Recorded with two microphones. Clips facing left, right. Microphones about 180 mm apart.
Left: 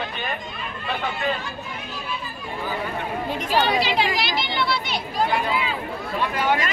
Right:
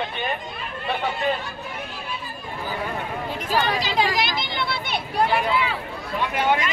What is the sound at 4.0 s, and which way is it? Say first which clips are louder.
Speech: right 1 dB; 45° right (ahead or behind).